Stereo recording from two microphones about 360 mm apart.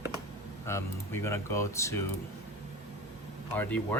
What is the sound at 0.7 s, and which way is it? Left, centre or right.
Speech, centre.